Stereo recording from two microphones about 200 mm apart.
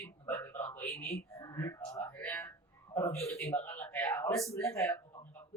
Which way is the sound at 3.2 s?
15° left (ahead or behind).